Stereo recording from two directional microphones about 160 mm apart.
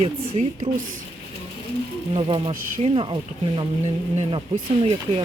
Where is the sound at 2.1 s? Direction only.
35° right (ahead or behind).